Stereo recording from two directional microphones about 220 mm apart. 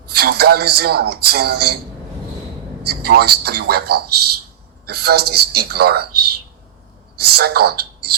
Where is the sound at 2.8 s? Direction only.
45° right (ahead or behind).